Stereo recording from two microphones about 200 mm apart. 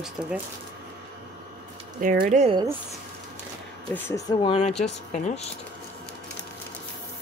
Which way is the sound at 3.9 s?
15° left (ahead or behind).